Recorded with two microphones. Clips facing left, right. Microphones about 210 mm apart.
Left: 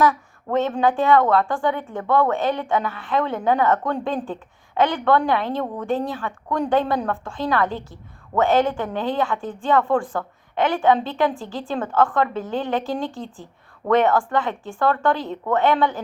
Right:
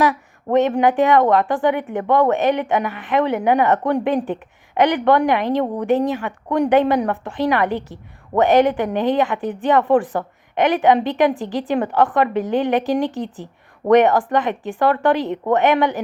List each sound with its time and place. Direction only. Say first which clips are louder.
0.0 s a woman's voice: right 1 dB; 20° right (ahead or behind)